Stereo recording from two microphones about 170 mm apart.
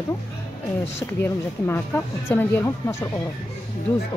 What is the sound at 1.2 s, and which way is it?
Speech, 15° left (ahead or behind).